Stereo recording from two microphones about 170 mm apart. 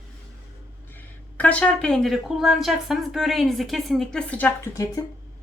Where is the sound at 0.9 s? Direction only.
10° left (ahead or behind).